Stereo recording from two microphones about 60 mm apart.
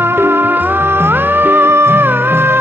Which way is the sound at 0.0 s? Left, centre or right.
Right.